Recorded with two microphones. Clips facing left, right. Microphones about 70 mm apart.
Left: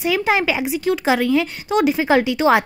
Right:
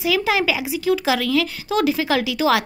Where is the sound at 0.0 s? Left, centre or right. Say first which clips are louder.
Left 1 dB; centre.